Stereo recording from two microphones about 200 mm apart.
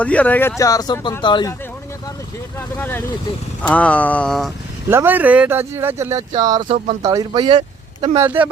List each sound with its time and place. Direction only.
0.0 s speech: 5° left (ahead or behind); by 1.5 s 25° left (ahead or behind)
2.6 s speech: 10° left (ahead or behind)
4.9 s speech: 10° right (ahead or behind)
8.2 s speech: 10° right (ahead or behind)